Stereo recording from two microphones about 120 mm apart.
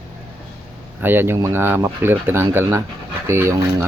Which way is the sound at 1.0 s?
20° right (ahead or behind).